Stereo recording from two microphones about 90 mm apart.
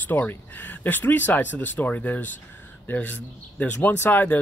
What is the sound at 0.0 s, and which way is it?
Speech, 20° left (ahead or behind).